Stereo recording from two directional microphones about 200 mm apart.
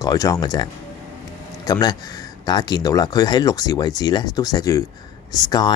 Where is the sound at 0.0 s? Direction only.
20° left (ahead or behind).